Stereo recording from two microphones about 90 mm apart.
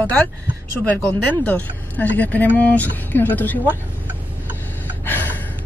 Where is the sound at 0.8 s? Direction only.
15° left (ahead or behind).